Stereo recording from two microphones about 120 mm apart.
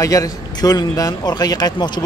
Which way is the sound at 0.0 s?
30° left (ahead or behind).